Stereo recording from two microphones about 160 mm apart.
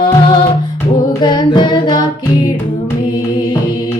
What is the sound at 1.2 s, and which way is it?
Singing, 30° left (ahead or behind).